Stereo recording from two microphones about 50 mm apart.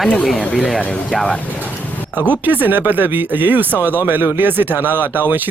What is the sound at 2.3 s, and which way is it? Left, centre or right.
Speech, right.